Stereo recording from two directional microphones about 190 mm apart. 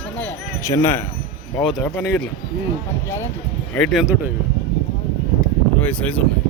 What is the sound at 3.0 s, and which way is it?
Speech, 15° left (ahead or behind).